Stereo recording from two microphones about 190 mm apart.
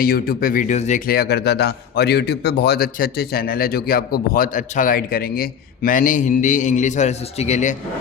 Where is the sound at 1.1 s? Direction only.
60° left (ahead or behind); by 7.7 s 35° left (ahead or behind).